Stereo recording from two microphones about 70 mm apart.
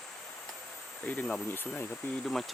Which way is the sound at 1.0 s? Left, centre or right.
Left.